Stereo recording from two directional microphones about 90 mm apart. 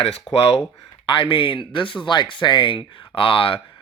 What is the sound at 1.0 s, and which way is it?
Speech, 70° left (ahead or behind).